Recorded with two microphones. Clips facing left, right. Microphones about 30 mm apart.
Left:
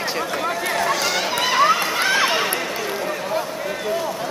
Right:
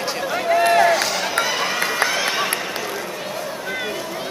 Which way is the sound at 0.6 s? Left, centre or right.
Right.